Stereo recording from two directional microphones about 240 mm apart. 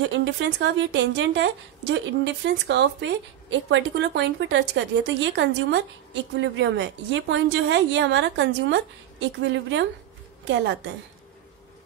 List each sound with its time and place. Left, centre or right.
0.1 s speech: right